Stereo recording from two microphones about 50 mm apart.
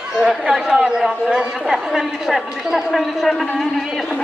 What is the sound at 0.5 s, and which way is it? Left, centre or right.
A man's voice, centre.